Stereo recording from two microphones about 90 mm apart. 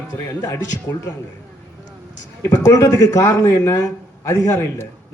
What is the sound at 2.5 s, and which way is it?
A man's voice, 40° left (ahead or behind).